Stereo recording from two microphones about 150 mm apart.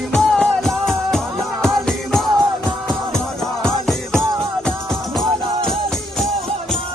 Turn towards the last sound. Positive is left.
turn(degrees=5)  # may be behind; listen again after turning